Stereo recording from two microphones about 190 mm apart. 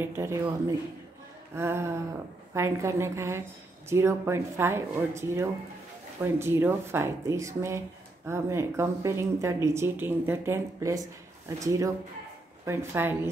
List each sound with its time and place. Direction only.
0.0 s speech: 15° right (ahead or behind)